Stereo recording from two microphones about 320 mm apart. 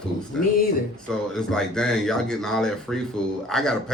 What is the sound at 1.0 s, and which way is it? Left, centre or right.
A man's voice, centre.